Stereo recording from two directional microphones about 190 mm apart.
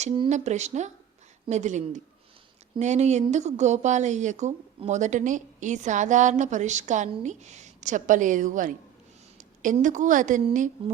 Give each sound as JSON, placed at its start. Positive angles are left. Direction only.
{"t": 0.0, "sound": "a woman's voice", "side_deg": -30}